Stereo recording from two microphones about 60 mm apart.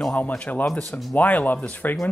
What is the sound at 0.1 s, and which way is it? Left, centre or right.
Speech, left.